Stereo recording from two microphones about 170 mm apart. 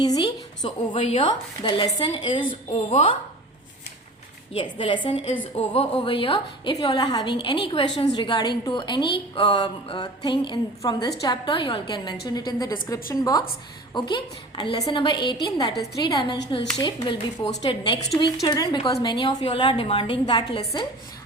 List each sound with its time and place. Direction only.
0.0 s a woman's voice: 25° left (ahead or behind)
4.5 s a woman's voice: 30° left (ahead or behind)